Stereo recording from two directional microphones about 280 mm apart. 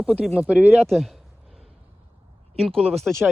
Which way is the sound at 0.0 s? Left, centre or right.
Centre.